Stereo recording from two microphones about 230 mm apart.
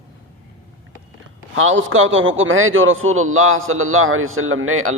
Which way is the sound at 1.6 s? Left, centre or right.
Right.